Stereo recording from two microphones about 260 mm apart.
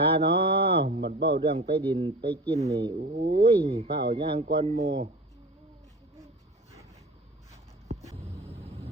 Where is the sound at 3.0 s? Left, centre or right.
Right.